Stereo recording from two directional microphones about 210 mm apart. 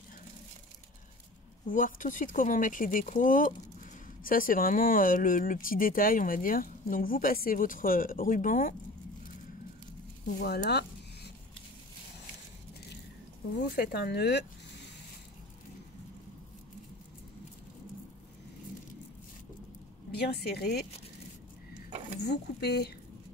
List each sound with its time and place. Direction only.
1.7 s speech: 40° left (ahead or behind)
10.4 s a sound: 50° left (ahead or behind)
13.7 s speech: 50° left (ahead or behind)
20.1 s speech: 50° left (ahead or behind)
22.2 s speech: 50° left (ahead or behind)